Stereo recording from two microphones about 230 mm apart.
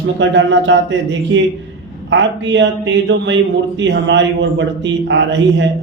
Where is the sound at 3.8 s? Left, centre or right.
Right.